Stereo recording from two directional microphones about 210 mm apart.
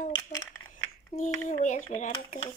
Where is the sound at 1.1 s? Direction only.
40° left (ahead or behind).